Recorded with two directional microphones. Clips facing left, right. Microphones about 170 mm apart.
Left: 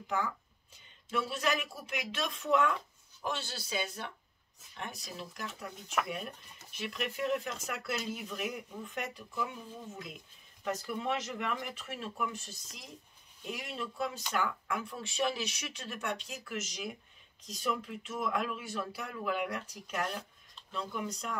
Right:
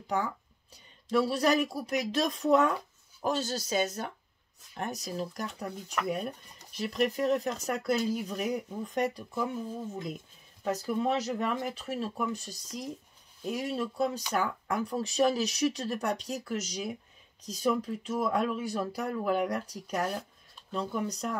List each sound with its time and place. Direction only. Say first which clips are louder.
0.0 s speech: right 3 dB; 35° right (ahead or behind)
6.7 s speech: right 9 dB; 40° right (ahead or behind)
10.6 s speech: right 6 dB; 40° right (ahead or behind)